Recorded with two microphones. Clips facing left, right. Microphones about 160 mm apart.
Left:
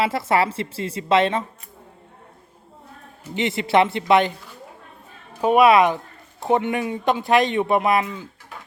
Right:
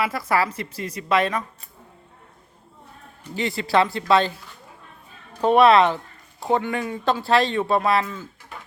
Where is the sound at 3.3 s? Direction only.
20° left (ahead or behind).